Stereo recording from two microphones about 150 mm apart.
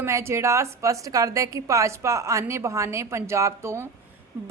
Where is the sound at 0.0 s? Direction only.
15° right (ahead or behind).